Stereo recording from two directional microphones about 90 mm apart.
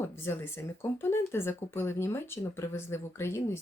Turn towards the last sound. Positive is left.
turn(degrees=30)  # may be behind; listen again after turning